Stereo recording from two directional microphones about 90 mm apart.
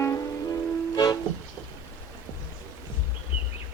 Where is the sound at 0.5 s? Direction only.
45° left (ahead or behind).